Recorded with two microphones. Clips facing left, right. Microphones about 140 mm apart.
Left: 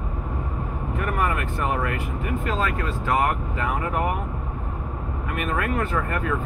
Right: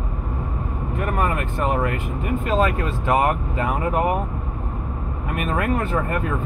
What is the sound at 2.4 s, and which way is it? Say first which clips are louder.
Speech: right 6 dB; 20° right (ahead or behind).